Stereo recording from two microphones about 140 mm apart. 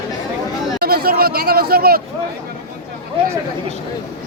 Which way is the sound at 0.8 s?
90° right.